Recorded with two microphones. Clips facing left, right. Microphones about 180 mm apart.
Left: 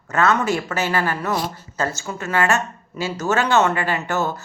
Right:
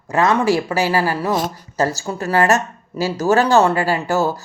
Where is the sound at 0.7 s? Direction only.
35° right (ahead or behind).